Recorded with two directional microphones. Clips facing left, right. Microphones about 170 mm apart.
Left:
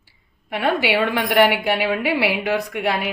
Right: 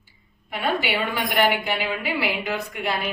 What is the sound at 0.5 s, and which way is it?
A woman's voice, 85° left.